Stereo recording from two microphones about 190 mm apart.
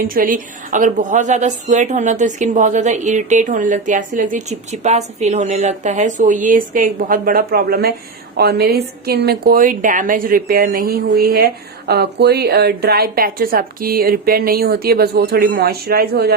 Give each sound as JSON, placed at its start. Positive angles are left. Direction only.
{"t": 0.0, "sound": "a woman's voice", "side_deg": -45}